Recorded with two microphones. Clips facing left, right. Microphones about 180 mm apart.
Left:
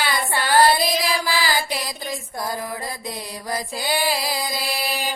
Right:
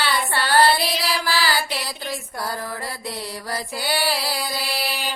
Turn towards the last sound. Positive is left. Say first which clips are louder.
# left 1 dB
turn(degrees=10)  # may be behind; listen again after turning